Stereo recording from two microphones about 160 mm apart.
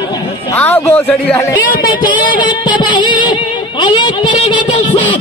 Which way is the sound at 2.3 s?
30° left (ahead or behind).